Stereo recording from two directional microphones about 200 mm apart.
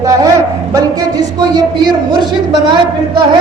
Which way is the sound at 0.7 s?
20° right (ahead or behind).